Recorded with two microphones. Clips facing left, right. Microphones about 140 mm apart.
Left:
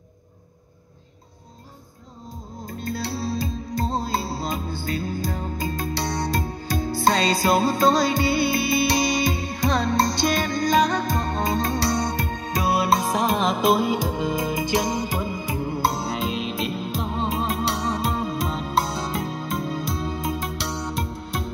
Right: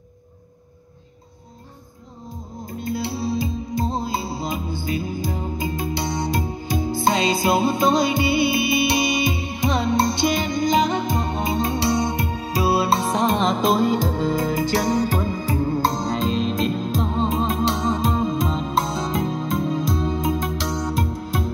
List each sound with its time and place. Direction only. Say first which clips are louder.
3.2 s music: right 3 dB; 20° right (ahead or behind); by 21.5 s centre (ahead or behind)